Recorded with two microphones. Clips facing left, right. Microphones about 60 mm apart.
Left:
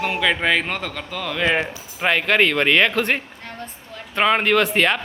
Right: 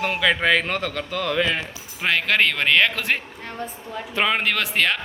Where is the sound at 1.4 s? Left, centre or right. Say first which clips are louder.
Left 4 dB; left.